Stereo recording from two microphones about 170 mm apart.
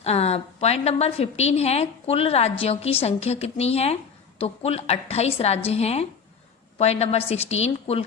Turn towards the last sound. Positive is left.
turn(degrees=40)  # may be behind; listen again after turning